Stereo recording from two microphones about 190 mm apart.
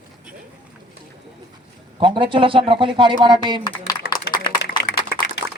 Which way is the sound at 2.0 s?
25° right (ahead or behind).